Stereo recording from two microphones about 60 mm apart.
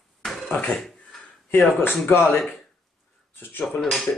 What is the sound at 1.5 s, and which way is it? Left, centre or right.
Speech, left.